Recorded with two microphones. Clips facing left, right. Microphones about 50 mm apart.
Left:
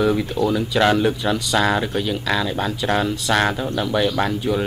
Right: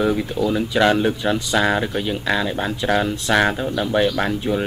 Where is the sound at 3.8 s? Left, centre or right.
Right.